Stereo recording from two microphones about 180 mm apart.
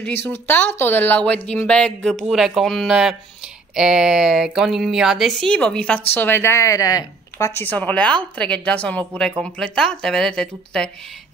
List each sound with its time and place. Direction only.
0.0 s a woman's voice: 10° left (ahead or behind)